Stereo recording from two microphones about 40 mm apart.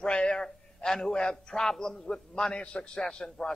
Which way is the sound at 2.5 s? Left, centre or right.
Left.